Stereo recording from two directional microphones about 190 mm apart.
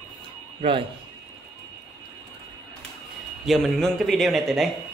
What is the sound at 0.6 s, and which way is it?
Speech, 30° right (ahead or behind).